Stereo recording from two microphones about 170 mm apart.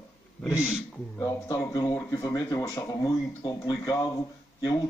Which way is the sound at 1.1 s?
20° left (ahead or behind).